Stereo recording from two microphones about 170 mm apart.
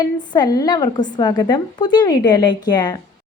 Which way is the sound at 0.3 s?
25° left (ahead or behind).